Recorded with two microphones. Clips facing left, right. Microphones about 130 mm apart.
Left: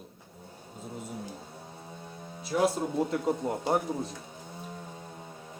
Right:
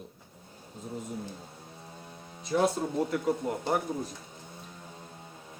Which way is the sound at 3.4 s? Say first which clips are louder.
Left 1 dB; 30° left (ahead or behind).